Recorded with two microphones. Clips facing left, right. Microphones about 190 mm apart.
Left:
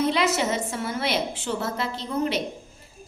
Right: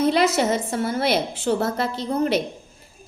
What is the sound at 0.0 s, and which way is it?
A woman's voice, 45° right (ahead or behind).